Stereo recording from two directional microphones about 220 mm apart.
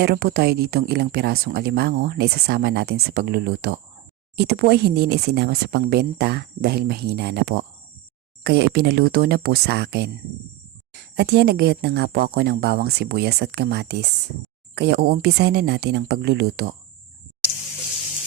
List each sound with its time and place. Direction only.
0.0 s speech: 45° right (ahead or behind)